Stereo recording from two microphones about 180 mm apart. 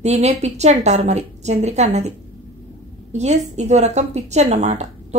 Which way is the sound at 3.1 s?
40° right (ahead or behind).